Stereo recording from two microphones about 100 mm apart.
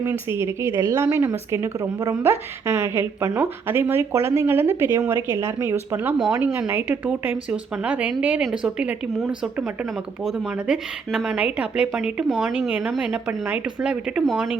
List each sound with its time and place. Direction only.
0.0 s a woman's voice: 25° right (ahead or behind)
2.3 s a woman's voice: 25° right (ahead or behind)
4.1 s a woman's voice: 30° right (ahead or behind); by 14.6 s 10° right (ahead or behind)